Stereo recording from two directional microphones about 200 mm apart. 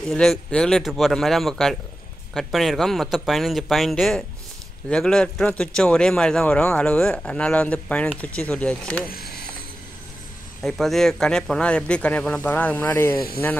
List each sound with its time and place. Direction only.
0.0 s speech: centre (ahead or behind)
9.1 s mechanisms: 50° left (ahead or behind)
10.6 s speech: centre (ahead or behind)